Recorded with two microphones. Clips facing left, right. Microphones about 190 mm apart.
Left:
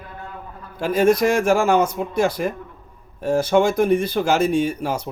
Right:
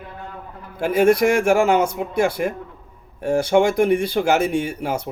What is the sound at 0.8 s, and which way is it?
Speech, 10° right (ahead or behind).